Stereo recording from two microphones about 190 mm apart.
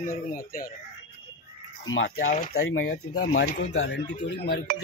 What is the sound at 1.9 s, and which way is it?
Speech, 75° left (ahead or behind).